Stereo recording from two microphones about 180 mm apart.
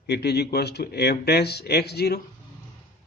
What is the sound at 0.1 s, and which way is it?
Speech, 65° left (ahead or behind).